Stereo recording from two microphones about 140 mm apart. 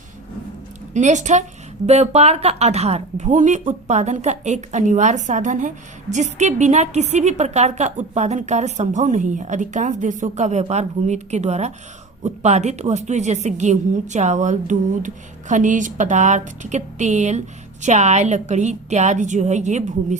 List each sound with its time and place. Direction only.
0.9 s speech: 60° right (ahead or behind)